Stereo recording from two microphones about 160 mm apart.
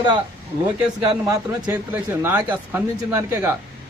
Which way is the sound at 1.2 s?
15° right (ahead or behind).